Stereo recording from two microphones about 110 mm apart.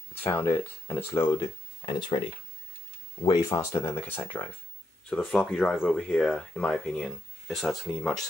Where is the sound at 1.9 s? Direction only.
45° left (ahead or behind).